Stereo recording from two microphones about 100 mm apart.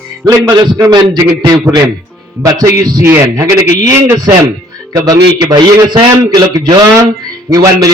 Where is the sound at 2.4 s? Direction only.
30° right (ahead or behind).